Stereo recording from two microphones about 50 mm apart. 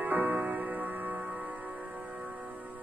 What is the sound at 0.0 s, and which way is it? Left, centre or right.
Music, right.